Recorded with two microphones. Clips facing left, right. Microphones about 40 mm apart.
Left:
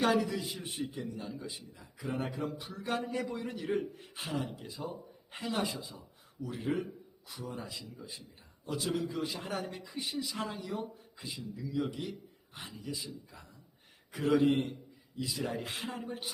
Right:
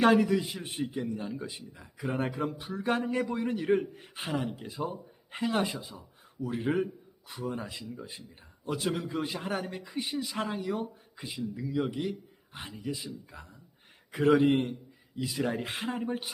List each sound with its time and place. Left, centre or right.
0.0 s speech: right
8.6 s speech: right